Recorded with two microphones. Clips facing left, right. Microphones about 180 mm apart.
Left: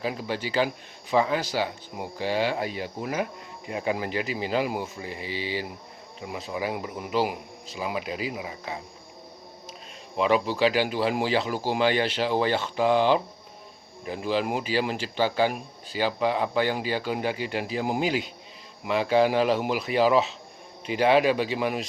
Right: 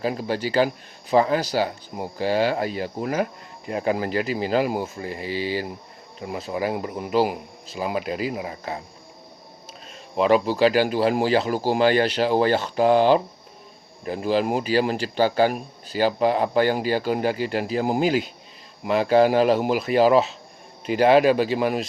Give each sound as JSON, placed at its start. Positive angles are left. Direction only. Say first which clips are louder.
{"t": 0.0, "sound": "speech", "louder": "right 5 dB", "side_deg": -45}
{"t": 10.2, "sound": "speech", "louder": "right 4 dB", "side_deg": -40}